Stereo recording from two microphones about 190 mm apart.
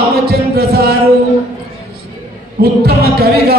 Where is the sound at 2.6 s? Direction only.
55° right (ahead or behind).